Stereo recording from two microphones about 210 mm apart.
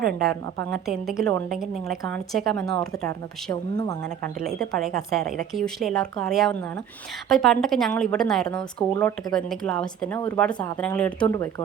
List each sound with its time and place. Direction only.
0.0 s a woman's voice: 50° right (ahead or behind)
1.5 s a woman's voice: centre (ahead or behind)
2.7 s speech: 20° left (ahead or behind)
4.4 s a woman's voice: 45° right (ahead or behind)
4.6 s a woman's voice: centre (ahead or behind)